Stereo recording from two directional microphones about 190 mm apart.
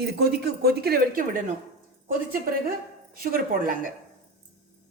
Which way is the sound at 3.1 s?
50° right (ahead or behind).